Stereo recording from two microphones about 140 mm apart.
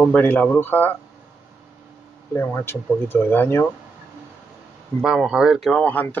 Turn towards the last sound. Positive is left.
turn(degrees=10)  # may be behind; listen again after turning